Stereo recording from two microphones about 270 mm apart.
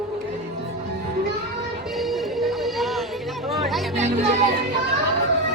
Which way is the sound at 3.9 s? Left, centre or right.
Right.